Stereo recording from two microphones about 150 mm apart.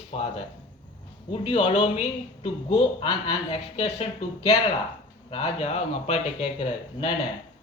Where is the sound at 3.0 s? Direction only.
35° left (ahead or behind).